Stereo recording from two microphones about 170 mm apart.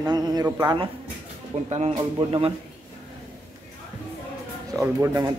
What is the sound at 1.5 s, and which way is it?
Speech, 40° right (ahead or behind).